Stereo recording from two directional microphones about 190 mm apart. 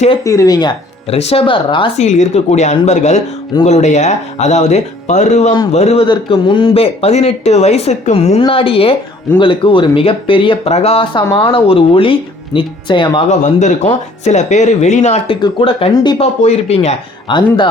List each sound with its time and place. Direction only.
0.3 s speech: 20° left (ahead or behind)
2.0 s speech: 35° left (ahead or behind)
13.4 s speech: 40° left (ahead or behind)
15.4 s speech: 25° left (ahead or behind)